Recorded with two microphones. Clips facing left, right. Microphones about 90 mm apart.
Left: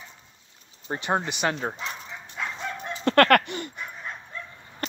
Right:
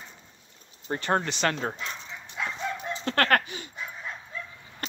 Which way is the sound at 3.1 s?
60° left (ahead or behind).